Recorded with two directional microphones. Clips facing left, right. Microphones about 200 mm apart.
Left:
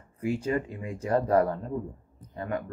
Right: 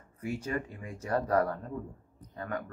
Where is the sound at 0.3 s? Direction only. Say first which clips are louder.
Left 6 dB; 30° left (ahead or behind).